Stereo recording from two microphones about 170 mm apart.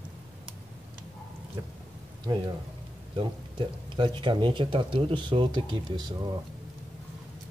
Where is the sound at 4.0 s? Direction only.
30° right (ahead or behind).